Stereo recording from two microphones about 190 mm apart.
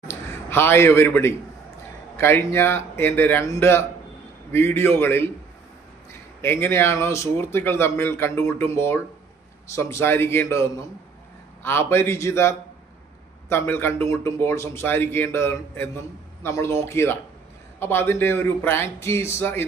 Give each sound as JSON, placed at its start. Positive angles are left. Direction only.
{"t": 0.1, "sound": "a man's voice", "side_deg": 10}
{"t": 6.4, "sound": "speech", "side_deg": 10}